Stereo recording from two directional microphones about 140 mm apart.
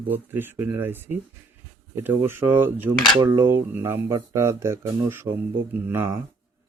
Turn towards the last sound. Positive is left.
turn(degrees=-15)  # may be behind; listen again after turning